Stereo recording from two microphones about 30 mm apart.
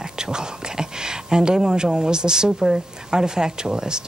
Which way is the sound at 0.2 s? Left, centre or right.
Right.